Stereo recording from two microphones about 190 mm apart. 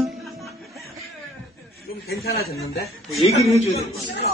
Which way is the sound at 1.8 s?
55° left (ahead or behind).